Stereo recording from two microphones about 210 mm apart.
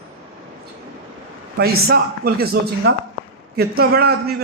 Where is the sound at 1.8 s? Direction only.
45° right (ahead or behind).